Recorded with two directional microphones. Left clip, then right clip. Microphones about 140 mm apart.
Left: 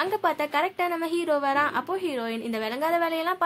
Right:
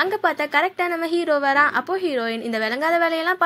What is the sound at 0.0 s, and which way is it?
A woman's voice, 15° right (ahead or behind).